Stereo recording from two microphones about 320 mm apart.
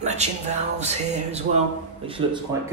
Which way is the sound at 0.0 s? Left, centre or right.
Right.